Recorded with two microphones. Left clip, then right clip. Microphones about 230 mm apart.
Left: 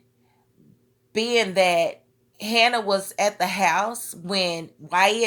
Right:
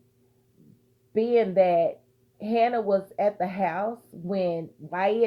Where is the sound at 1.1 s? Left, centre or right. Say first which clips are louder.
Left 1 dB; centre.